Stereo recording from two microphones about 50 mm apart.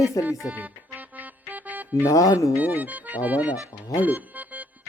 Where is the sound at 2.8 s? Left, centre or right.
Right.